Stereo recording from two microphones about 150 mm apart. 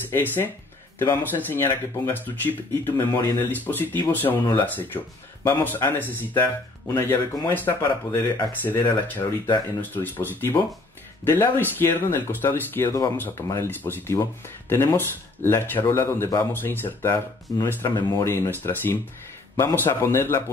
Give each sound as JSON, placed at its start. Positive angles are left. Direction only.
{"t": 0.9, "sound": "speech", "side_deg": 15}